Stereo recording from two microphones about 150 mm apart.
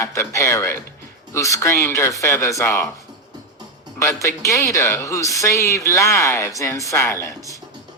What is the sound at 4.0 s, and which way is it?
Speech, 20° left (ahead or behind).